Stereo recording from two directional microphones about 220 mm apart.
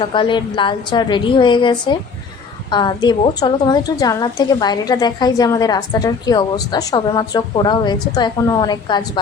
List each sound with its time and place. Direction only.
0.0 s a woman's voice: 20° left (ahead or behind)